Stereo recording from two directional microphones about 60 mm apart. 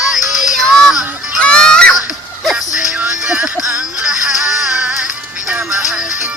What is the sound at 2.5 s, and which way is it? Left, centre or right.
Music, right.